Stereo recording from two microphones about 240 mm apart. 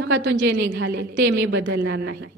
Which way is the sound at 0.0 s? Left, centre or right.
Right.